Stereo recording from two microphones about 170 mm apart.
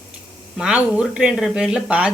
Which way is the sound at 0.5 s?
5° right (ahead or behind).